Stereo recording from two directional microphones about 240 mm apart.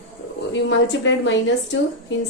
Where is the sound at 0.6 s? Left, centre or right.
Left.